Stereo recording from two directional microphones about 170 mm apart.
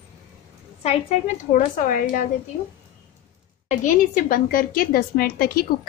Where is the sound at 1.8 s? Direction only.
50° left (ahead or behind).